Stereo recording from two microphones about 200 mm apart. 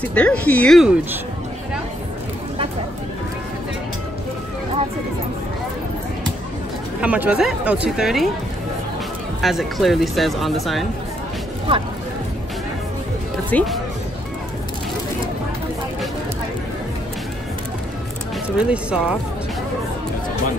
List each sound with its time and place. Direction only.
0.0 s speech: 5° left (ahead or behind)
7.0 s speech: 5° right (ahead or behind)
9.4 s speech: centre (ahead or behind)
13.5 s speech: 5° left (ahead or behind)
18.6 s speech: 5° right (ahead or behind)